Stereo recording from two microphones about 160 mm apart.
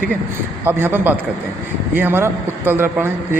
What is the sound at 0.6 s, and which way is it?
A man's voice, 15° right (ahead or behind).